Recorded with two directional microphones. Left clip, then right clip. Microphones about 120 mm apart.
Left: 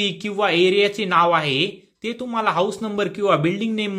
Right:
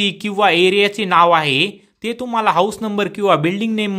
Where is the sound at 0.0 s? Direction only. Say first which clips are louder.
Right 6 dB; 40° right (ahead or behind).